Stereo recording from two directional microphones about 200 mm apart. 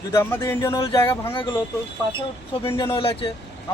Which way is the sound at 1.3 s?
25° left (ahead or behind).